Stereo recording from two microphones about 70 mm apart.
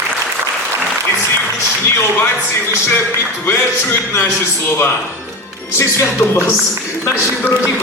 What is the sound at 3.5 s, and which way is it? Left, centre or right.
A man's voice, left.